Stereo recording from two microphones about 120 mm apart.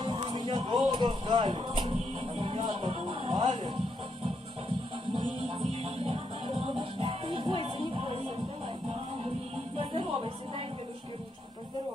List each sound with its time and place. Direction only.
0.0 s a sound: 40° right (ahead or behind)
2.1 s music: 50° right (ahead or behind)
5.1 s music: 45° right (ahead or behind)
9.8 s music: 50° right (ahead or behind)